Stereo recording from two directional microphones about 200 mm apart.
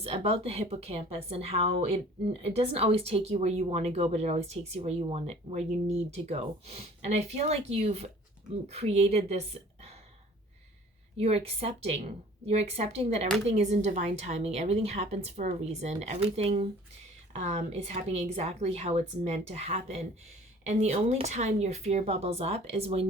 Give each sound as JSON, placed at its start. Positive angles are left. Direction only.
{"t": 0.0, "sound": "a woman's voice", "side_deg": -30}
{"t": 11.2, "sound": "a woman's voice", "side_deg": -30}